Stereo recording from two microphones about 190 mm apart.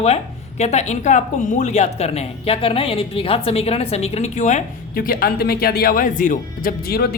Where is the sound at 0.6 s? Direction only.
35° left (ahead or behind).